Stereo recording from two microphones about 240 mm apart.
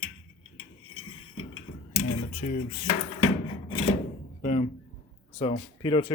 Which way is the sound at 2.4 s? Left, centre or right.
Left.